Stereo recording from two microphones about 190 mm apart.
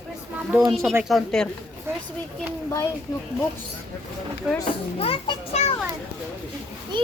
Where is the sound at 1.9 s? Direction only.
10° right (ahead or behind).